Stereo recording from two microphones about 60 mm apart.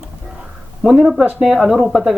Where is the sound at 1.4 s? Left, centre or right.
Centre.